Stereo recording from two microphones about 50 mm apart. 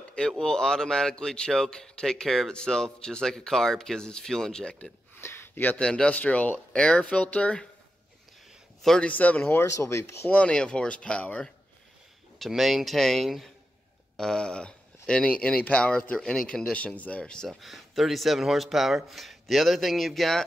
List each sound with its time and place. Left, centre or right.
0.4 s speech: centre
5.1 s a sound: left
5.8 s speech: centre
6.1 s speech: left
9.0 s speech: left
9.5 s speech: left
10.3 s speech: left
12.4 s speech: centre; by 16.0 s left
16.2 s speech: centre
16.7 s speech: left
17.5 s speech: centre